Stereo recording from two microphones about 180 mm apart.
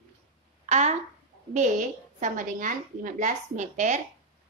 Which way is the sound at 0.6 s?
40° right (ahead or behind).